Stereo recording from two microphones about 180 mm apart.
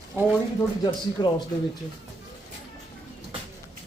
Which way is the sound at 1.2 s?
25° left (ahead or behind).